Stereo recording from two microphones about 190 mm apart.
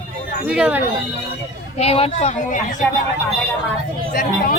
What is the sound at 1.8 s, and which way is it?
Speech, 30° left (ahead or behind).